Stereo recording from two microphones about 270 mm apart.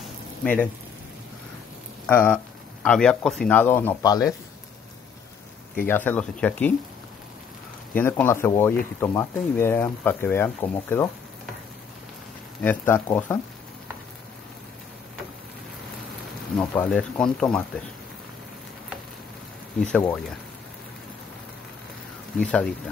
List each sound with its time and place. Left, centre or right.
0.4 s speech: centre
2.0 s speech: centre
5.8 s speech: centre
7.9 s speech: centre
12.6 s speech: centre
16.5 s speech: centre
19.8 s speech: centre
22.4 s speech: centre